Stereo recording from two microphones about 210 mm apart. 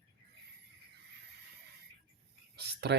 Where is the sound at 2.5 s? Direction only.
50° right (ahead or behind).